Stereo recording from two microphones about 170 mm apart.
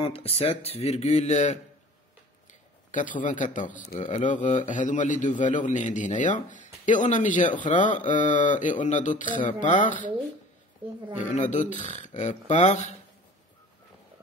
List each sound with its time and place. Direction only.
0.0 s speech: 35° left (ahead or behind)
2.9 s a man's voice: 50° left (ahead or behind)
11.1 s a man's voice: 45° left (ahead or behind)